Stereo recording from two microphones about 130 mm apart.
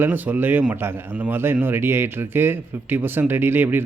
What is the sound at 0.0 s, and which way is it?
A man's voice, 15° right (ahead or behind).